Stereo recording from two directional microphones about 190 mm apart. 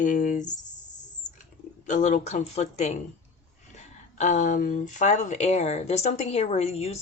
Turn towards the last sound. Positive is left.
turn(degrees=35)  # may be behind; listen again after turning